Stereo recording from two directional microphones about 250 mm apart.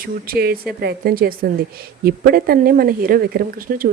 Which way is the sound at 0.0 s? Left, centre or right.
Right.